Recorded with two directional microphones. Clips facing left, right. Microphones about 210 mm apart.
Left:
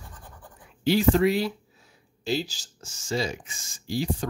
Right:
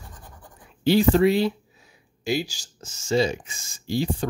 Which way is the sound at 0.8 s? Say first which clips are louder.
Right 3 dB; 30° right (ahead or behind).